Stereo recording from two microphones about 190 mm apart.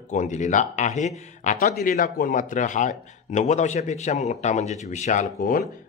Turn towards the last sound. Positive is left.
turn(degrees=45)  # may be behind; listen again after turning